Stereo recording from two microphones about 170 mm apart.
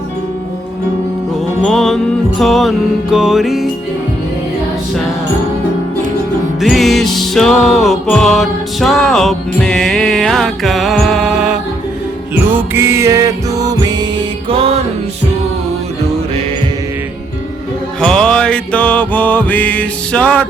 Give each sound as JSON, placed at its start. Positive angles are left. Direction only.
{"t": 1.6, "sound": "music", "side_deg": 0}
{"t": 6.6, "sound": "music", "side_deg": 0}
{"t": 12.3, "sound": "music", "side_deg": -10}
{"t": 18.0, "sound": "music", "side_deg": 5}